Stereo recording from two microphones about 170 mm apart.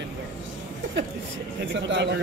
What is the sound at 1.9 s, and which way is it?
Speech, 90° right.